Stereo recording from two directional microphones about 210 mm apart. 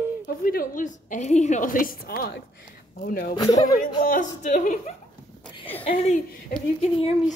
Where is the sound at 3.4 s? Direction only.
15° left (ahead or behind).